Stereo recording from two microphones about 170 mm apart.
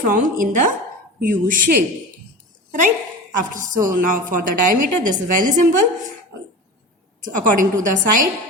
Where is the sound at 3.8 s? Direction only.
55° right (ahead or behind).